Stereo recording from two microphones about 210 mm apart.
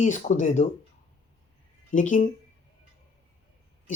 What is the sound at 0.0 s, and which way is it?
Speech, 35° left (ahead or behind).